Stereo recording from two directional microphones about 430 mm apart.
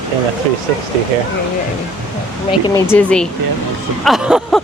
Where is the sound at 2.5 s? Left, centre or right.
Centre.